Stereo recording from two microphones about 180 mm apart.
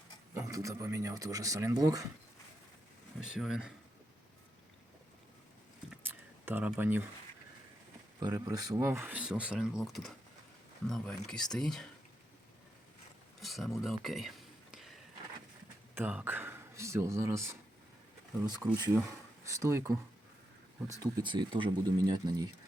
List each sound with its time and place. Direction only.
0.3 s speech: 15° right (ahead or behind)
3.2 s speech: 5° right (ahead or behind)
6.0 s a sound: 10° right (ahead or behind)
8.2 s speech: 20° right (ahead or behind); by 11.9 s 5° left (ahead or behind)
13.4 s speech: centre (ahead or behind)
16.0 s speech: 10° right (ahead or behind)
21.2 s speech: 25° right (ahead or behind)